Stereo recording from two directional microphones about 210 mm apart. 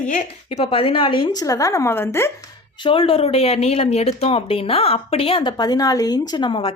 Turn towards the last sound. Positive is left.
turn(degrees=25)  # may be behind; listen again after turning